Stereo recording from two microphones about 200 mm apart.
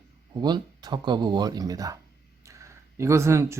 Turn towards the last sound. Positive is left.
turn(degrees=-15)  # may be behind; listen again after turning